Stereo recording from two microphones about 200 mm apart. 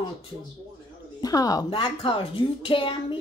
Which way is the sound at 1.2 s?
20° left (ahead or behind).